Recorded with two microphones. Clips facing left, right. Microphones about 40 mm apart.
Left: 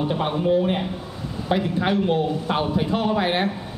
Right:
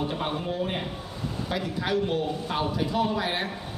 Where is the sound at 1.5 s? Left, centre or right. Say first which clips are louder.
Left 7 dB; left.